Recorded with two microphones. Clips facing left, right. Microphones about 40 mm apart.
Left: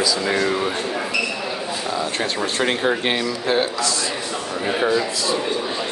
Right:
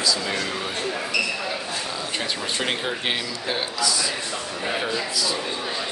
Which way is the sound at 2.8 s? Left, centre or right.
Centre.